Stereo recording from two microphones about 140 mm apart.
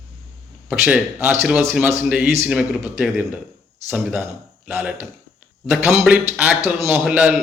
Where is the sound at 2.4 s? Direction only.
5° right (ahead or behind).